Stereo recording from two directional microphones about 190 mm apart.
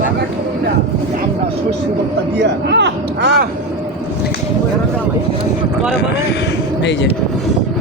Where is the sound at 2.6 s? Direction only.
65° right (ahead or behind).